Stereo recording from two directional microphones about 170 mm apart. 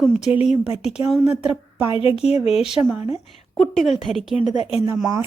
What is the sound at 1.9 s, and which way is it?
Speech, 30° left (ahead or behind).